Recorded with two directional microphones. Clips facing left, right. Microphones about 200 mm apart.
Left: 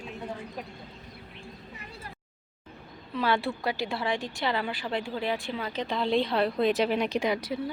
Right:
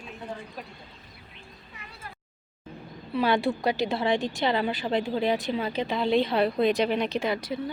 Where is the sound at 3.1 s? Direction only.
15° right (ahead or behind).